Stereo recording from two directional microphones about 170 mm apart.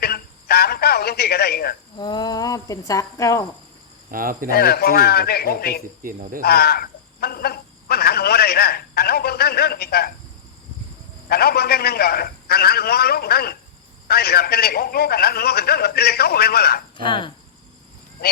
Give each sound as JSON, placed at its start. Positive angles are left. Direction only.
{"t": 0.0, "sound": "radio", "side_deg": 65}
{"t": 2.0, "sound": "speech", "side_deg": 25}
{"t": 4.1, "sound": "speech", "side_deg": -55}
{"t": 4.4, "sound": "a man's voice", "side_deg": 65}
{"t": 6.0, "sound": "speech", "side_deg": -55}
{"t": 6.4, "sound": "speech", "side_deg": 65}
{"t": 11.3, "sound": "a man's voice", "side_deg": 65}
{"t": 17.0, "sound": "speech", "side_deg": 30}